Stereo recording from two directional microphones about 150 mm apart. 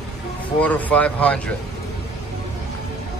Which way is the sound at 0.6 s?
10° left (ahead or behind).